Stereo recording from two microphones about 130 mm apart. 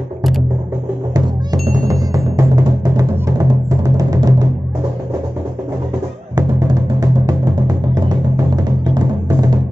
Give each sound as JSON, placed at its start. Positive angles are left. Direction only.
{"t": 1.1, "sound": "music", "side_deg": -30}
{"t": 6.3, "sound": "music", "side_deg": -30}